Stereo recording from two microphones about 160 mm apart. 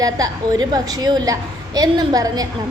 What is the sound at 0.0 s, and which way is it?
A woman's voice, 25° right (ahead or behind).